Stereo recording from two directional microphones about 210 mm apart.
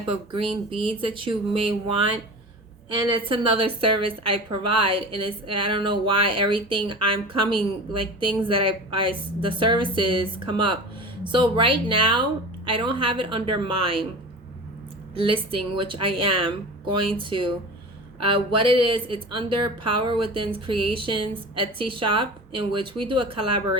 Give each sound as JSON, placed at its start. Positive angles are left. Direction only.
{"t": 0.0, "sound": "a woman's voice", "side_deg": -25}
{"t": 2.9, "sound": "a woman's voice", "side_deg": -25}
{"t": 15.1, "sound": "a woman's voice", "side_deg": -25}